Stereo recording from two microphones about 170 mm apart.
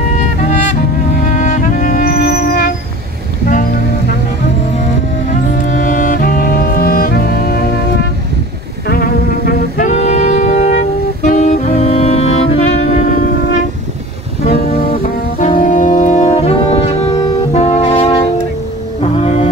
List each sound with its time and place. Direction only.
1.3 s music: 45° left (ahead or behind)
5.3 s music: 50° left (ahead or behind)
8.8 s music: 60° left (ahead or behind); by 12.6 s 40° left (ahead or behind)
14.9 s brass instrument: 45° left (ahead or behind)
17.5 s saxophone: 40° left (ahead or behind)